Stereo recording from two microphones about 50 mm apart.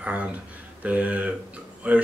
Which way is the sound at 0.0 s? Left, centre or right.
Right.